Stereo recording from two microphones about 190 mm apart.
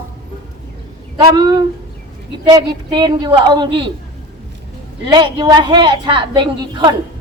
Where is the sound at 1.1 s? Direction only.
25° right (ahead or behind).